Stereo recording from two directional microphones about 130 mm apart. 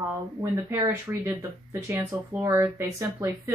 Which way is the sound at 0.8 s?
25° right (ahead or behind).